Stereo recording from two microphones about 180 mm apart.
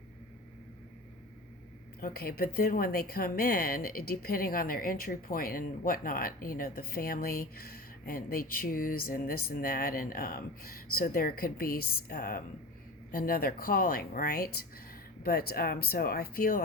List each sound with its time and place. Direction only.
2.0 s a woman's voice: 55° left (ahead or behind)